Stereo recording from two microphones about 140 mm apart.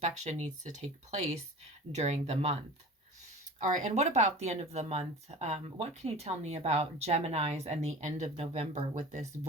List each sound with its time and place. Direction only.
0.0 s speech: 55° right (ahead or behind)
3.6 s speech: 55° right (ahead or behind)